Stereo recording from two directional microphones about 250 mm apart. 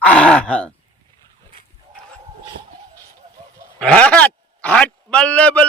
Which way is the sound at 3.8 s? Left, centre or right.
Centre.